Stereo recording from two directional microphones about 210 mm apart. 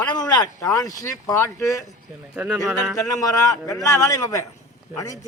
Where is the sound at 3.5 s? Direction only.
15° left (ahead or behind).